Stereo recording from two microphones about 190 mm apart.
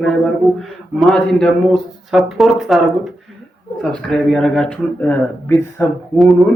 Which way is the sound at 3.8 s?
Centre (ahead or behind).